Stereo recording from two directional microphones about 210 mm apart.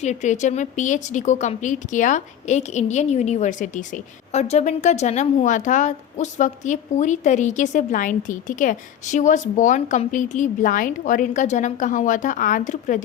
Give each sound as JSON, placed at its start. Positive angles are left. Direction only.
{"t": 0.0, "sound": "speech", "side_deg": 35}